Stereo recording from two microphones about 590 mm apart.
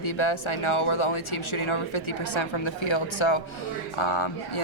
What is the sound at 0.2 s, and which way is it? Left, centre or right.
Speech, left.